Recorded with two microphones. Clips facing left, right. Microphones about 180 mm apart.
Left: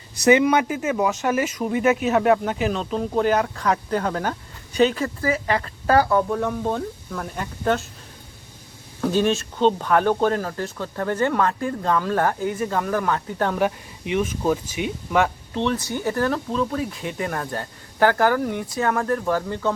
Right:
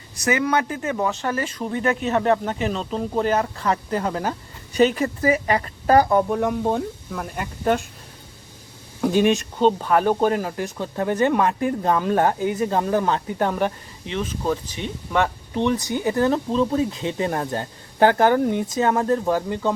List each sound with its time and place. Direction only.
0.3 s speech: 20° left (ahead or behind); by 4.4 s 5° right (ahead or behind)
4.8 s speech: 15° right (ahead or behind)
9.0 s speech: 15° right (ahead or behind)
13.6 s speech: 5° left (ahead or behind)
15.5 s speech: 15° right (ahead or behind)